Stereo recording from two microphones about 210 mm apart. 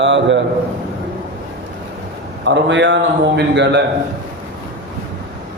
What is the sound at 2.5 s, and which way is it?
Speech, 60° right (ahead or behind).